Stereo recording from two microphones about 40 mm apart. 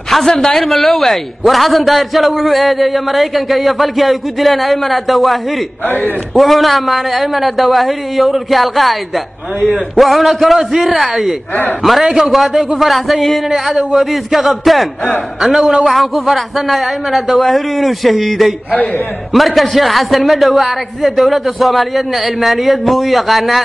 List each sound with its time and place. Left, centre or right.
0.1 s a man's voice: centre
5.9 s a man's voice: left
6.3 s a man's voice: centre